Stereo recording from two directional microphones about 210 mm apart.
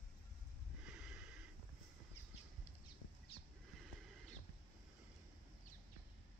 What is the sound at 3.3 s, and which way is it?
Horse, 25° left (ahead or behind).